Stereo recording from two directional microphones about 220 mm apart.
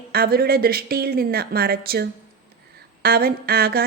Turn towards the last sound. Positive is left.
turn(degrees=-45)  # may be behind; listen again after turning